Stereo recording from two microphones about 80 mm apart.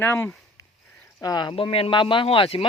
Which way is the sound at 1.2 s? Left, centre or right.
Left.